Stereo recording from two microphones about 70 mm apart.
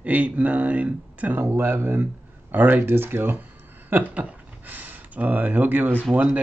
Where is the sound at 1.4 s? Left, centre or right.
Right.